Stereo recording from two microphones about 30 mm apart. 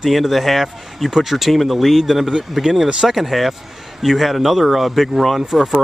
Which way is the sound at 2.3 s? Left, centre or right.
Right.